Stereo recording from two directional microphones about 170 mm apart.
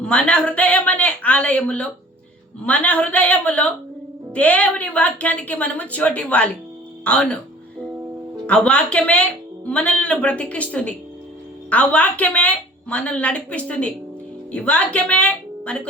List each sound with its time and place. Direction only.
0.0 s a woman's voice: 5° left (ahead or behind)
8.4 s a woman's voice: 5° left (ahead or behind)